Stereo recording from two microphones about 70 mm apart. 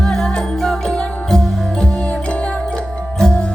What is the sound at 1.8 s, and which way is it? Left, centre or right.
Music, centre.